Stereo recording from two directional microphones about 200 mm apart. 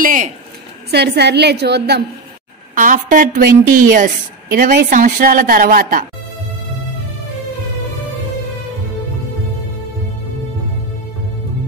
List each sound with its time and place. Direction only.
0.0 s a sound: 40° right (ahead or behind)
0.8 s a woman's voice: 55° right (ahead or behind)
2.7 s a woman's voice: 40° right (ahead or behind)